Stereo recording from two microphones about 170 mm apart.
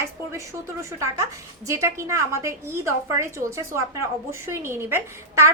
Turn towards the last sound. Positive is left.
turn(degrees=-15)  # may be behind; listen again after turning